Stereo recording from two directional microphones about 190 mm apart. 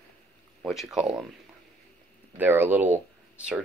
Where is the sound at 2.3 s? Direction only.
10° right (ahead or behind).